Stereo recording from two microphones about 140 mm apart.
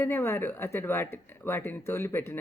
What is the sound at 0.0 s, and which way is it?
Speech, 20° left (ahead or behind).